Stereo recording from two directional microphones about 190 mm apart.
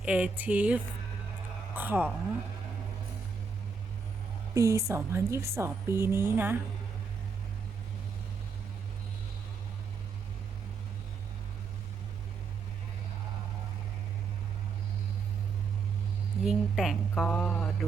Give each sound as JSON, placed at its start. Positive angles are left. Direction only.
{"t": 0.0, "sound": "a woman's voice", "side_deg": -5}
{"t": 4.5, "sound": "a woman's voice", "side_deg": -15}
{"t": 16.4, "sound": "speech", "side_deg": 0}